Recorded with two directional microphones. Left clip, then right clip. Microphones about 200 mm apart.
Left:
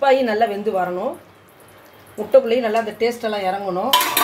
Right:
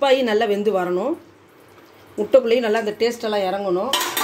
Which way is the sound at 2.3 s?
50° right (ahead or behind).